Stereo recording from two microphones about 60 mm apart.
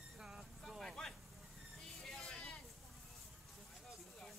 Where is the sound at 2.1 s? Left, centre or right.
Centre.